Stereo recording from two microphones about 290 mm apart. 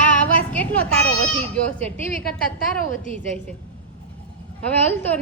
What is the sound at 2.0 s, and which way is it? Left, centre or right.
Speech, left.